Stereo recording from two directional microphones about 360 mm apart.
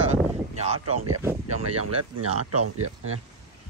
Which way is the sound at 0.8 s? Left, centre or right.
Right.